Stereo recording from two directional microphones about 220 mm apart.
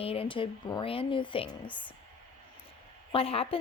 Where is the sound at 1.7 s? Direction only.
5° left (ahead or behind).